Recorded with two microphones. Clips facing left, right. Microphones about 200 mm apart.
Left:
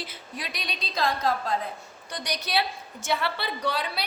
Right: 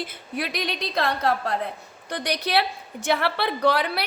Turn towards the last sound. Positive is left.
turn(degrees=-65)  # may be behind; listen again after turning